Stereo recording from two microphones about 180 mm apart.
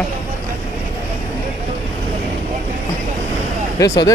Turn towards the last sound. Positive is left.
turn(degrees=20)  # may be behind; listen again after turning